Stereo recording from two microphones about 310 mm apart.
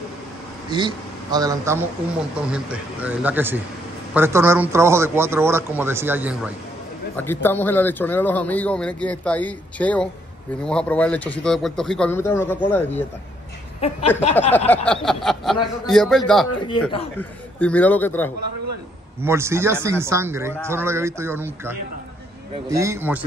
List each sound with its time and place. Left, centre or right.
0.7 s a man's voice: centre
7.2 s speech: centre
13.7 s speech: left
14.7 s a sound: centre
15.9 s speech: centre
19.2 s a man's voice: centre